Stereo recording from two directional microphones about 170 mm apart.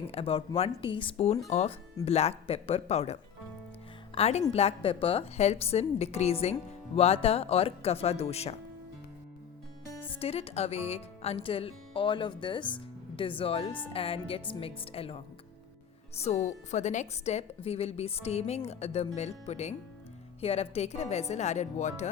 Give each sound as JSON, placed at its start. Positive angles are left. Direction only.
{"t": 0.1, "sound": "a woman's voice", "side_deg": 35}
{"t": 10.1, "sound": "a woman's voice", "side_deg": 35}